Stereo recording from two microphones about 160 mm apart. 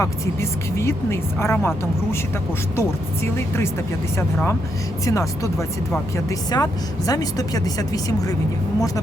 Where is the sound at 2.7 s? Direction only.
15° left (ahead or behind).